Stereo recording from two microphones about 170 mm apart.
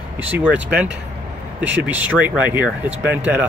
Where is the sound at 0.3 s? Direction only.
10° right (ahead or behind).